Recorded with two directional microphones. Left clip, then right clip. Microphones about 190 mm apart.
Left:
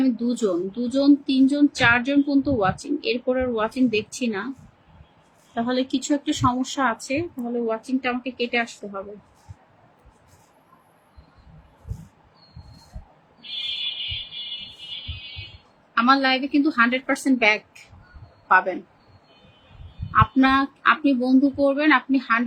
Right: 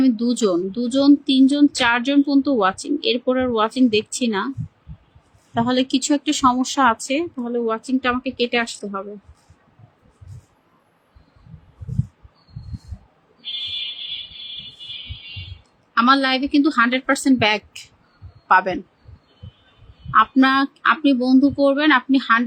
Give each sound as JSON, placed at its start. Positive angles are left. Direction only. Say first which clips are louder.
{"t": 0.0, "sound": "speech", "louder": "right 4 dB", "side_deg": -40}
{"t": 5.5, "sound": "speech", "louder": "right 5 dB", "side_deg": -40}
{"t": 16.0, "sound": "speech", "louder": "right 2 dB", "side_deg": -45}
{"t": 20.1, "sound": "speech", "louder": "right 3 dB", "side_deg": -40}